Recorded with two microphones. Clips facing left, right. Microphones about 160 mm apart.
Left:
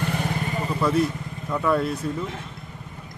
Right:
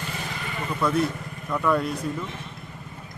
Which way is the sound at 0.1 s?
55° left (ahead or behind).